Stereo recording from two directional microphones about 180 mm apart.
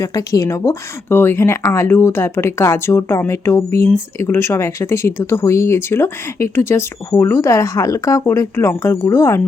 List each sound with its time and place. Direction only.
0.0 s speech: 20° left (ahead or behind)